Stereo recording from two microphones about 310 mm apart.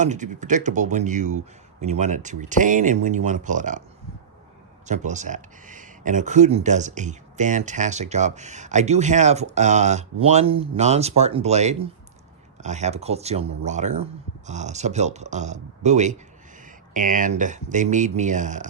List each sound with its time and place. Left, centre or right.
0.0 s speech: right
4.9 s speech: right